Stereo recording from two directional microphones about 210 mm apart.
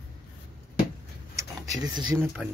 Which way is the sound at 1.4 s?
20° right (ahead or behind).